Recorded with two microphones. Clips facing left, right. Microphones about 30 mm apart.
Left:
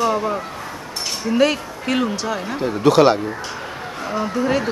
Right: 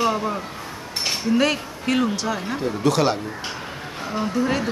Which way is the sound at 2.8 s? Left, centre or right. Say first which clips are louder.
Left 7 dB; left.